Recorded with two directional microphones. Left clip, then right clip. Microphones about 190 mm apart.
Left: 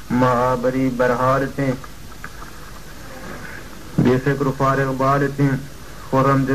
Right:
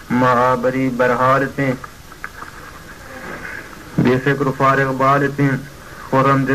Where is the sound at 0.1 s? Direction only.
40° right (ahead or behind).